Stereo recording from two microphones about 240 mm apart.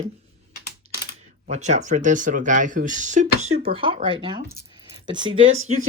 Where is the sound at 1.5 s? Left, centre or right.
Right.